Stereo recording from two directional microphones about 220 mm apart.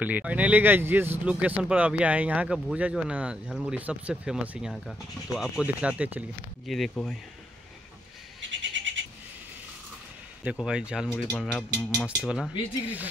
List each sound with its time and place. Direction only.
0.0 s speech: 5° right (ahead or behind)
8.4 s bird: 55° right (ahead or behind)
10.4 s speech: 5° right (ahead or behind)